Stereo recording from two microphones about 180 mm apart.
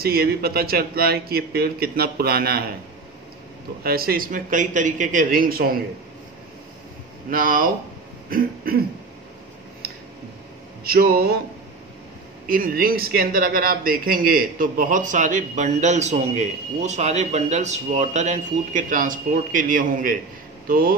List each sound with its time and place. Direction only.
0.0 s speech: 55° right (ahead or behind)
3.8 s speech: 55° right (ahead or behind)
7.2 s speech: 50° right (ahead or behind)
10.8 s speech: 55° right (ahead or behind)
12.4 s speech: 50° right (ahead or behind)